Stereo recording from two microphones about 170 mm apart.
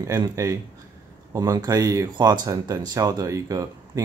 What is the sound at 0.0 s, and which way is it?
Speech, 20° right (ahead or behind).